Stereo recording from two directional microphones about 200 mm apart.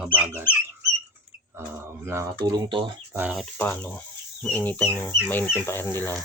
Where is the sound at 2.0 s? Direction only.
15° right (ahead or behind).